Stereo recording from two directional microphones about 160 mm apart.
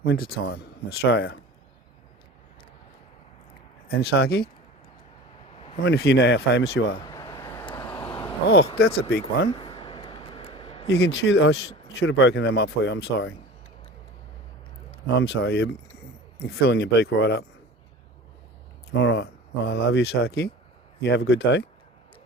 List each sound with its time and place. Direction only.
0.0 s speech: 75° left (ahead or behind)
3.8 s speech: 80° left
5.8 s speech: 90° left
7.1 s vehicle: 25° left (ahead or behind)
7.9 s a sound: 15° left (ahead or behind)
9.0 s speech: 90° left
9.6 s a sound: 30° left (ahead or behind)
10.8 s speech: 90° left
15.0 s speech: 90° left
19.0 s speech: 90° left